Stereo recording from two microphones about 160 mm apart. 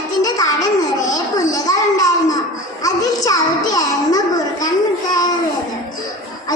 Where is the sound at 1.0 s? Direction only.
20° left (ahead or behind).